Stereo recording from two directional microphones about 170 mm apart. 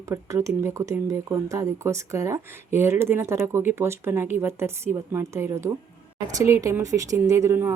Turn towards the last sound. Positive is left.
turn(degrees=-15)  # may be behind; listen again after turning